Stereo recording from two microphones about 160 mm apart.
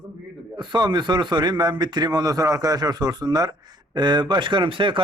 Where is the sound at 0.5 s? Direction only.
30° right (ahead or behind).